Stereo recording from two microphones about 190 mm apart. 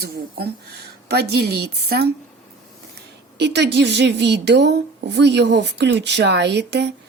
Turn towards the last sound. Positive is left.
turn(degrees=-65)  # may be behind; listen again after turning